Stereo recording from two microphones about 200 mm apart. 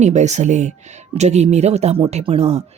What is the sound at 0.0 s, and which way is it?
Speech, 35° right (ahead or behind).